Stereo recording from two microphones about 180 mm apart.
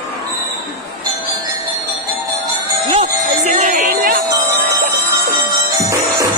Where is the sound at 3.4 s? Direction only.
40° right (ahead or behind).